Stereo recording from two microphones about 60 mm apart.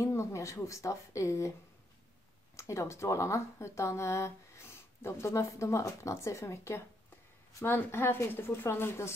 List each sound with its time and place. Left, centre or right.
0.0 s speech: left
2.5 s speech: left
4.1 s speech: left
7.6 s a woman's voice: left